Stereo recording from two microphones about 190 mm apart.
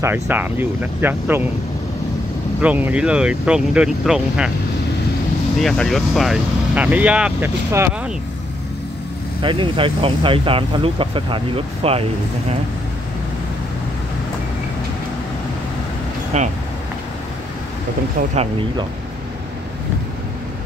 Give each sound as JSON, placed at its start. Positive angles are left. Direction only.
{"t": 0.0, "sound": "speech", "side_deg": -10}
{"t": 2.6, "sound": "speech", "side_deg": -5}
{"t": 5.6, "sound": "speech", "side_deg": 0}
{"t": 9.4, "sound": "speech", "side_deg": -25}
{"t": 16.3, "sound": "speech", "side_deg": -35}